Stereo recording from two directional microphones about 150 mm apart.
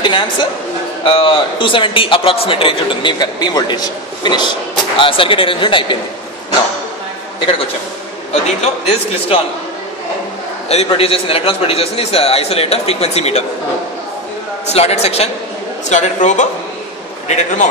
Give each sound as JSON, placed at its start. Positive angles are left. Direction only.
{"t": 0.0, "sound": "a man's voice", "side_deg": 30}
{"t": 8.5, "sound": "a man's voice", "side_deg": 45}
{"t": 10.7, "sound": "a man's voice", "side_deg": 40}
{"t": 14.7, "sound": "a man's voice", "side_deg": 45}